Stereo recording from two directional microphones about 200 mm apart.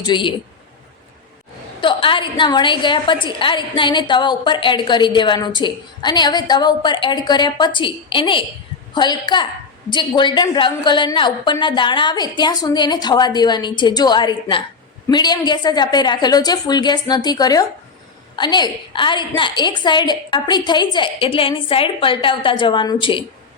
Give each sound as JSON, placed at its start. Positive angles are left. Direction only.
{"t": 0.0, "sound": "a woman's voice", "side_deg": 25}
{"t": 1.8, "sound": "a woman's voice", "side_deg": 25}